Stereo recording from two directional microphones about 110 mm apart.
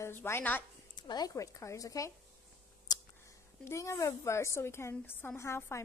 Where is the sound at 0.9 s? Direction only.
40° left (ahead or behind).